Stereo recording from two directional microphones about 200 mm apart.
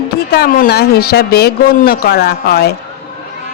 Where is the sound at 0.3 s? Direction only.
50° left (ahead or behind).